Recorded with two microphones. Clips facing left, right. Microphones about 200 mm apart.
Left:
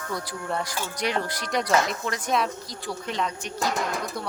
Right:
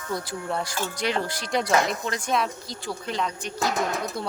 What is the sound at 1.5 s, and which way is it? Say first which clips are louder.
Speech: right 1 dB; centre (ahead or behind).